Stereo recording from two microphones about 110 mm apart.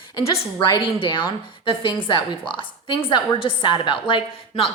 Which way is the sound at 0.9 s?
45° left (ahead or behind).